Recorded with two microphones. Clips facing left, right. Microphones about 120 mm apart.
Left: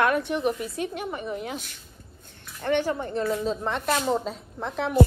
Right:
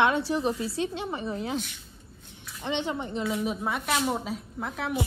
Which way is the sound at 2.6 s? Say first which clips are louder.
Left 5 dB; 20° right (ahead or behind).